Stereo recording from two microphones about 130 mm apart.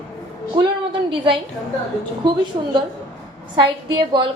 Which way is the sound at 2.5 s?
45° right (ahead or behind).